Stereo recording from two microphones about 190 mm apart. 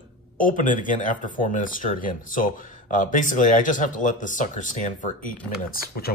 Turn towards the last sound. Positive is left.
turn(degrees=55)  # may be behind; listen again after turning